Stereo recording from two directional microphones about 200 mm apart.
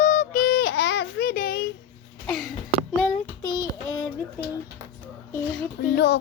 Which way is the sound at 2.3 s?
Centre (ahead or behind).